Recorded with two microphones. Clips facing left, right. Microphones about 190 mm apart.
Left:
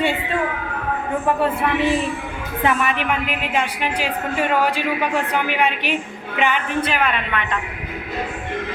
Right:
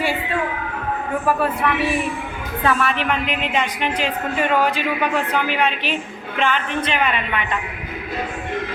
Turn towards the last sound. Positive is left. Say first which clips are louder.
# even
turn(degrees=0)  # may be behind; listen again after turning